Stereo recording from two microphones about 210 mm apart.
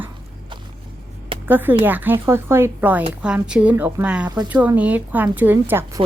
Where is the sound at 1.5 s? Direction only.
10° right (ahead or behind).